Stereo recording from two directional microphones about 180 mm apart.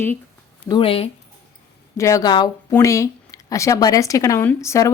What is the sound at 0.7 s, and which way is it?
Speech, 30° left (ahead or behind).